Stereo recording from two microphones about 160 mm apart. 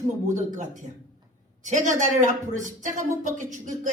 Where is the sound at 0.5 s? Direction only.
50° right (ahead or behind).